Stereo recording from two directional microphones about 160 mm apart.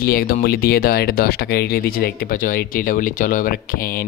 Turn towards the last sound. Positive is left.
turn(degrees=60)  # may be behind; listen again after turning